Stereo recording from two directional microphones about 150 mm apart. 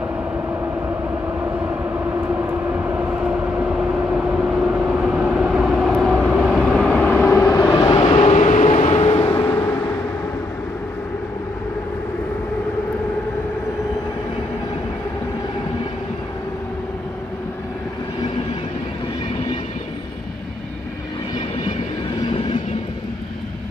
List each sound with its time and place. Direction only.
2.0 s vehicle: 10° right (ahead or behind); by 7.7 s 20° left (ahead or behind)
7.9 s vehicle: 35° left (ahead or behind)
9.3 s vehicle: 15° left (ahead or behind)